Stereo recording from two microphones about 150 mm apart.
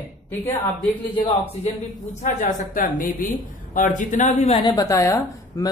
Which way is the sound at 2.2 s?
60° left (ahead or behind).